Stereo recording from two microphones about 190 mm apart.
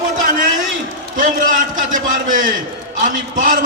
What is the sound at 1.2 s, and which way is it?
A man's voice, 45° right (ahead or behind).